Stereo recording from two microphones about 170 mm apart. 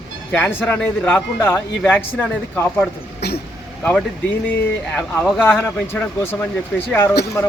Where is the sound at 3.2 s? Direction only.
70° left (ahead or behind).